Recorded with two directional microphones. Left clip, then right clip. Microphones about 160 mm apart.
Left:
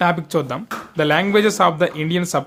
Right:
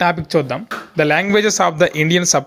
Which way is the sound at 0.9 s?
20° right (ahead or behind).